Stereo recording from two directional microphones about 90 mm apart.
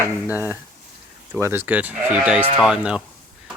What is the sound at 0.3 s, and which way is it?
Speech, 25° right (ahead or behind).